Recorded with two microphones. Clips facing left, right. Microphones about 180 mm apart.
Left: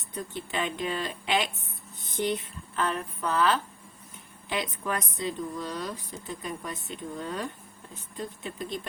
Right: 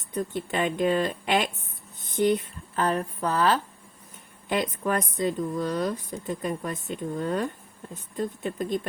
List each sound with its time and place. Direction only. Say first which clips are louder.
0.3 s speech: right 5 dB; 50° right (ahead or behind)
4.4 s speech: right 5 dB; 50° right (ahead or behind)